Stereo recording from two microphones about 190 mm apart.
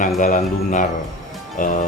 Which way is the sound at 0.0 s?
45° left (ahead or behind).